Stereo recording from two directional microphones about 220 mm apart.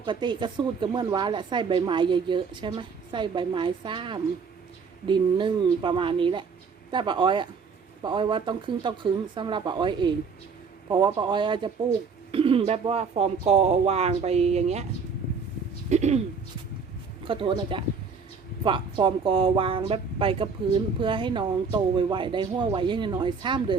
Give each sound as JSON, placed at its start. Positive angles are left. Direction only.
{"t": 0.0, "sound": "speech", "side_deg": -20}
{"t": 15.9, "sound": "speech", "side_deg": -30}
{"t": 17.2, "sound": "speech", "side_deg": -25}